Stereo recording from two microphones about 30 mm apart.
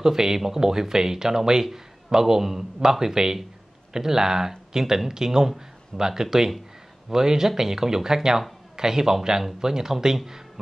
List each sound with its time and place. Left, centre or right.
0.0 s a man's voice: centre